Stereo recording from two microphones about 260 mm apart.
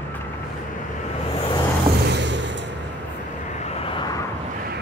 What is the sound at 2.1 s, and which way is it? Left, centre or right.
Vehicle, right.